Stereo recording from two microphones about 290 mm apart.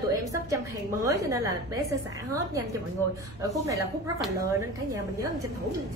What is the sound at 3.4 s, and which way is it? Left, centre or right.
Speech, centre.